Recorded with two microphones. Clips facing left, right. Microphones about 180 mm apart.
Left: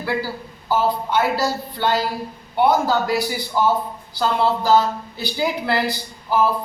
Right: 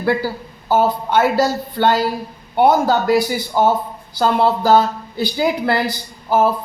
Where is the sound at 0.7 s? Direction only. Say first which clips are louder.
Right 4 dB; 50° right (ahead or behind).